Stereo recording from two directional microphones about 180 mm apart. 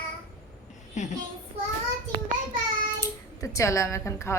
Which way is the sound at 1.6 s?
35° right (ahead or behind).